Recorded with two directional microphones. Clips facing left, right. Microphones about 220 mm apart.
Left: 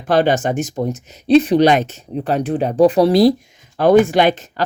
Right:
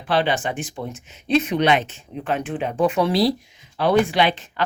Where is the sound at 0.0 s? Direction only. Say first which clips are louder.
Left 6 dB; 45° left (ahead or behind).